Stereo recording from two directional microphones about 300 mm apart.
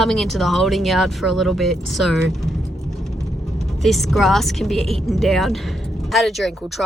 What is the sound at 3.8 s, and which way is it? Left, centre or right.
Speech, centre.